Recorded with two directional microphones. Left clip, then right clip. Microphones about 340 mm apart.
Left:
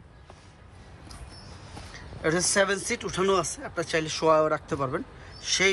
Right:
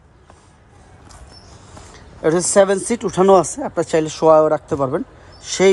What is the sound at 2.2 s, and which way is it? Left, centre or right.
A man's voice, centre.